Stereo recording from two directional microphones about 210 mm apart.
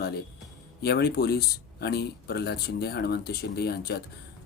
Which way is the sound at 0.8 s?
50° left (ahead or behind).